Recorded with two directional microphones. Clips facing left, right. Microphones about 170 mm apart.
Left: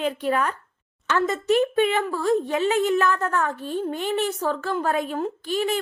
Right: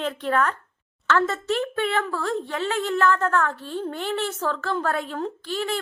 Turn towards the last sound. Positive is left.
turn(degrees=15)  # may be behind; listen again after turning